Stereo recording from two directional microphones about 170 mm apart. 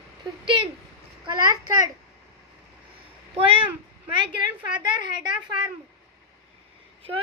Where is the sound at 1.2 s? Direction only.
20° right (ahead or behind).